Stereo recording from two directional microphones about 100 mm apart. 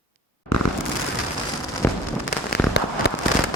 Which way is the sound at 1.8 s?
20° left (ahead or behind).